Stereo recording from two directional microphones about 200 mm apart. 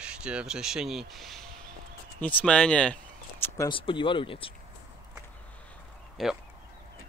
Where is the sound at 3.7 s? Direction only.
25° left (ahead or behind).